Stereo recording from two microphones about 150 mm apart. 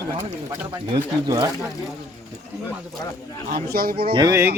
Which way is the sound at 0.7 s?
25° right (ahead or behind).